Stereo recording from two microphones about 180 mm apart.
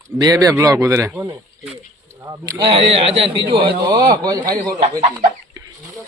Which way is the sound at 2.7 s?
35° right (ahead or behind).